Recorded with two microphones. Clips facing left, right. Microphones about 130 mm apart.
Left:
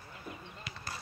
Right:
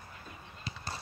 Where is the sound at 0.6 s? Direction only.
30° right (ahead or behind).